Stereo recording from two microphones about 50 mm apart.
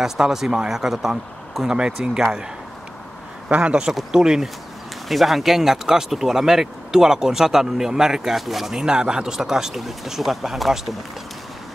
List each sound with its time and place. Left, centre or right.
0.0 s speech: centre
3.4 s speech: right
4.1 s speech: centre